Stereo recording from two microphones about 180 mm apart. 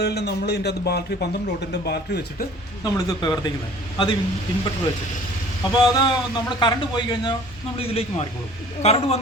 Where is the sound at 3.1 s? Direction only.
25° left (ahead or behind).